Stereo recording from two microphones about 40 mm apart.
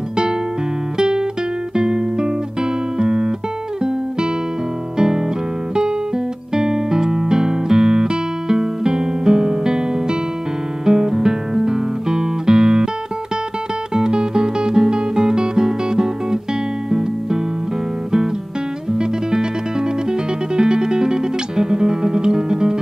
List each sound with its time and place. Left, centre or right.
0.9 s music: centre
4.9 s music: centre
10.9 s guitar: centre
13.9 s music: centre
18.9 s music: centre